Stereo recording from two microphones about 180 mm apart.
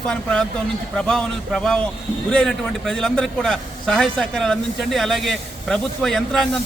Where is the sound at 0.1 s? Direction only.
5° left (ahead or behind).